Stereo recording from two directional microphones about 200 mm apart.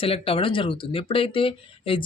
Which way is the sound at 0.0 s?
25° left (ahead or behind).